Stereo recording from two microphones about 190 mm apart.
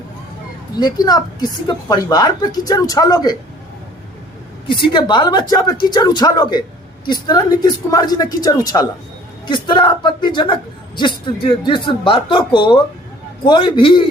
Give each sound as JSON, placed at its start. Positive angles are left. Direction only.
{"t": 0.8, "sound": "speech", "side_deg": 20}
{"t": 4.7, "sound": "speech", "side_deg": 25}